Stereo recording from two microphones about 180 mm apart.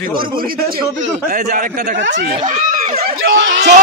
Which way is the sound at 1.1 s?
40° right (ahead or behind).